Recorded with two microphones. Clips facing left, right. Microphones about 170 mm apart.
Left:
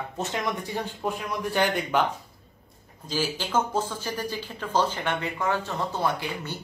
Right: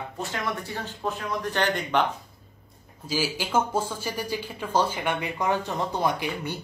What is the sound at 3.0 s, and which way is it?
Speech, 10° right (ahead or behind).